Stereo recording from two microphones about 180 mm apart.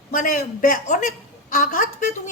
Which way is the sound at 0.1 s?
50° left (ahead or behind).